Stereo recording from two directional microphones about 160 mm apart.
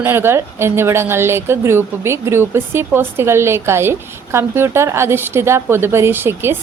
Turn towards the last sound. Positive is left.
turn(degrees=-15)  # may be behind; listen again after turning